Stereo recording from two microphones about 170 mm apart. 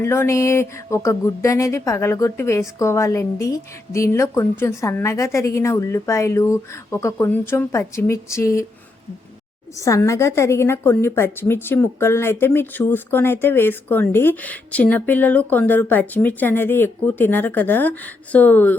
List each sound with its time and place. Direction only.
0.0 s a woman's voice: 15° left (ahead or behind)
9.7 s a woman's voice: 20° left (ahead or behind)